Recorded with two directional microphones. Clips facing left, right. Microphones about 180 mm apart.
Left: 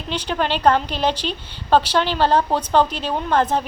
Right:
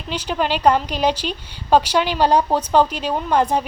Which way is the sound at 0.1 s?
5° right (ahead or behind).